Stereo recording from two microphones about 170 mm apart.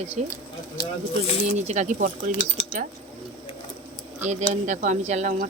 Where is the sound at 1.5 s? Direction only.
45° right (ahead or behind).